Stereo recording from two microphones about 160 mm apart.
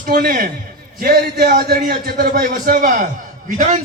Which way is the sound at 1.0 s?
70° right (ahead or behind).